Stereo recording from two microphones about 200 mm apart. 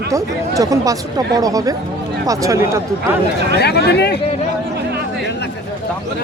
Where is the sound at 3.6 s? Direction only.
55° left (ahead or behind).